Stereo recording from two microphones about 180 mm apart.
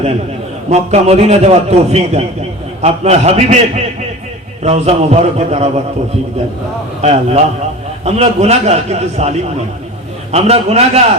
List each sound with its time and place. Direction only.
0.7 s a man's voice: 35° right (ahead or behind)
7.0 s a man's voice: 35° right (ahead or behind)
10.3 s a man's voice: 35° right (ahead or behind)